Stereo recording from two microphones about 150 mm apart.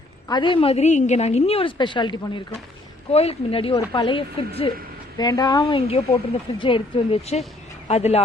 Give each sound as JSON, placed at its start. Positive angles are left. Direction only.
{"t": 0.3, "sound": "a woman's voice", "side_deg": 30}
{"t": 3.1, "sound": "a woman's voice", "side_deg": 40}
{"t": 5.1, "sound": "a woman's voice", "side_deg": 25}